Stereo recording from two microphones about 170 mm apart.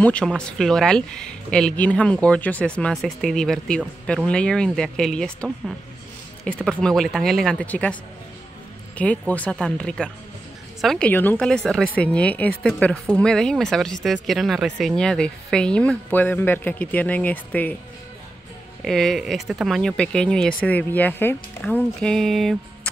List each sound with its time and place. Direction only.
0.0 s speech: 5° left (ahead or behind)
8.9 s speech: 10° left (ahead or behind)
18.9 s speech: centre (ahead or behind)